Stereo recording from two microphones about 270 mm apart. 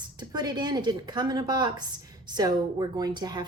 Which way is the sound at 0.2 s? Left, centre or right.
Centre.